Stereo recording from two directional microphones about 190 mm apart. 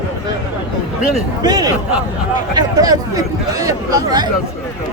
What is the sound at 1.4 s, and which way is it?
Speech, 20° right (ahead or behind).